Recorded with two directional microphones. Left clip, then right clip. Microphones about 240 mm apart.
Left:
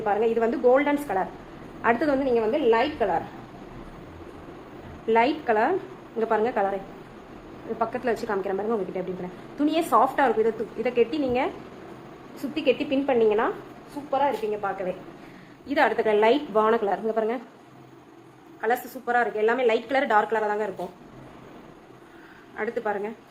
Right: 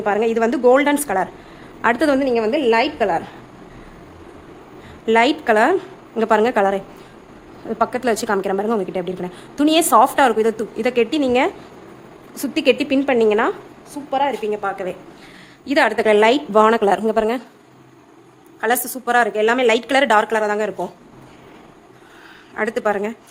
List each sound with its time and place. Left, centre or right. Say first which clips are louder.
0.0 s a woman's voice: right 5 dB; right
5.0 s a woman's voice: right 6 dB; right
7.8 s a woman's voice: right 8 dB; right
12.5 s a woman's voice: right 7 dB; right
18.6 s a woman's voice: right 6 dB; right
22.5 s a woman's voice: right 8 dB; right